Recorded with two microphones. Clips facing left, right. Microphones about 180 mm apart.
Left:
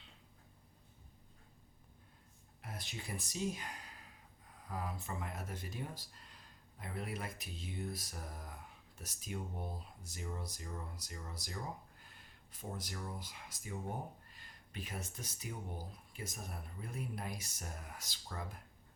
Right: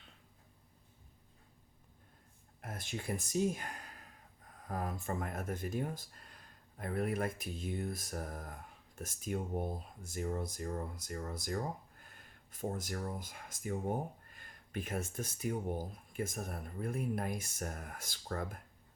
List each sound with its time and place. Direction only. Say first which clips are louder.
2.6 s speech: right 5 dB; 50° right (ahead or behind)